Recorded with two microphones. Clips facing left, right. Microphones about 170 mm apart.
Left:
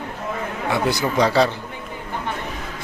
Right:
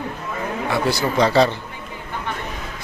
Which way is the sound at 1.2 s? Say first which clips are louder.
Right 2 dB; 5° left (ahead or behind).